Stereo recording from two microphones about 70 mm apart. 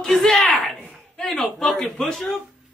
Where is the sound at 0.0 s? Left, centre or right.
Centre.